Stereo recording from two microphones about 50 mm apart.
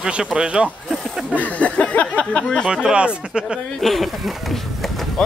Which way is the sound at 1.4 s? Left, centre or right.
Left.